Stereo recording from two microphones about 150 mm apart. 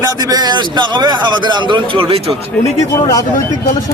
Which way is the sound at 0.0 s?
25° right (ahead or behind).